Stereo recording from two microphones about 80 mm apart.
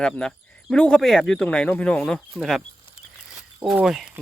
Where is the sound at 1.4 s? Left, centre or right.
Centre.